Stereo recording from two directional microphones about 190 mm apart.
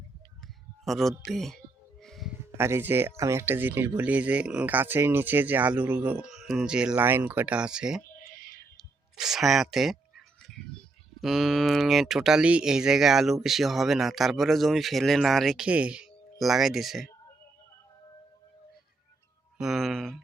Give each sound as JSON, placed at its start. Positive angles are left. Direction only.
{"t": 0.9, "sound": "speech", "side_deg": 0}
{"t": 2.0, "sound": "music", "side_deg": 0}
{"t": 2.6, "sound": "speech", "side_deg": -15}
{"t": 9.1, "sound": "speech", "side_deg": 0}
{"t": 11.2, "sound": "speech", "side_deg": 0}
{"t": 19.5, "sound": "speech", "side_deg": 0}